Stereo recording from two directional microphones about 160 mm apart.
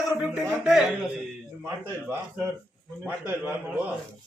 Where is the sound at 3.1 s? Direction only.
10° right (ahead or behind).